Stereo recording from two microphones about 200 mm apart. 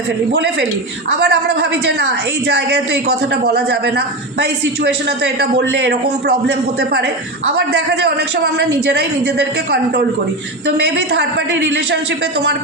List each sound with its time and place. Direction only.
1.1 s a woman's voice: 60° right (ahead or behind)
10.8 s a woman's voice: 55° right (ahead or behind)